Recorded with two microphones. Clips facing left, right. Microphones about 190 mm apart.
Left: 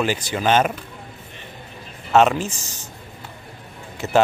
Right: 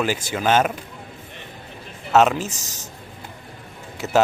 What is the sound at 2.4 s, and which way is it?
Speech, 40° right (ahead or behind).